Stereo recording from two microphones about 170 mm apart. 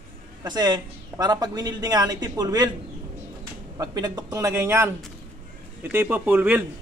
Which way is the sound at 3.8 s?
20° right (ahead or behind).